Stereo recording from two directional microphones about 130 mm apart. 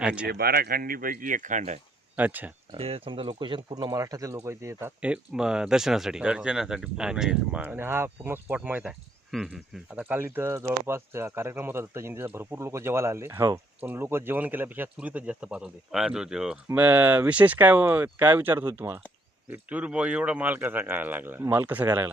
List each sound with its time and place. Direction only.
0.0 s speech: 10° right (ahead or behind)
0.8 s speech: 90° right; by 1.8 s 65° right (ahead or behind)
2.1 s speech: 15° right (ahead or behind)
2.7 s speech: 50° right (ahead or behind); by 22.1 s 15° right (ahead or behind)